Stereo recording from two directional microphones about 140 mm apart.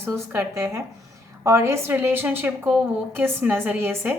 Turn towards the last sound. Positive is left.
turn(degrees=-15)  # may be behind; listen again after turning